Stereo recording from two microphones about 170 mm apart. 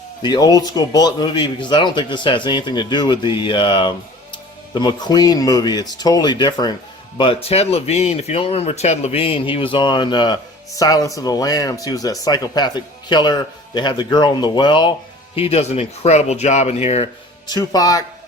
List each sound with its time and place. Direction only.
0.2 s speech: 25° left (ahead or behind)
17.4 s speech: 25° left (ahead or behind)